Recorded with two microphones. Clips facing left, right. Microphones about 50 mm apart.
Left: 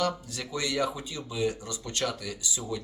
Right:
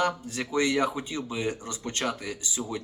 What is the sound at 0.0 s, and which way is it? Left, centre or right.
Speech, right.